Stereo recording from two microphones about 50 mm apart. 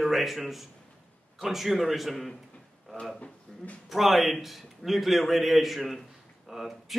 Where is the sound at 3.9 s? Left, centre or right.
Centre.